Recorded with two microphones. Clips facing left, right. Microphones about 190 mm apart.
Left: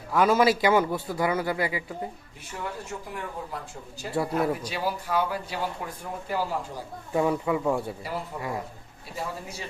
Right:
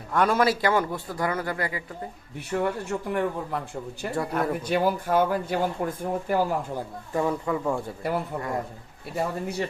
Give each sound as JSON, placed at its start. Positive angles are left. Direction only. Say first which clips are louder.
{"t": 0.1, "sound": "speech", "louder": "left 1 dB", "side_deg": 0}
{"t": 0.4, "sound": "speech", "louder": "left 2 dB", "side_deg": 20}
{"t": 2.5, "sound": "speech", "louder": "right 8 dB", "side_deg": -70}
{"t": 4.1, "sound": "speech", "louder": "left 1 dB", "side_deg": 5}
{"t": 4.6, "sound": "speech", "louder": "right 6 dB", "side_deg": -55}
{"t": 7.1, "sound": "speech", "louder": "left 1 dB", "side_deg": 10}
{"t": 8.0, "sound": "speech", "louder": "right 4 dB", "side_deg": -60}